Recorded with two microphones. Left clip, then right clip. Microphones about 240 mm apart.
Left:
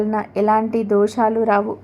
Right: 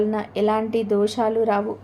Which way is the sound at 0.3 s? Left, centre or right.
Left.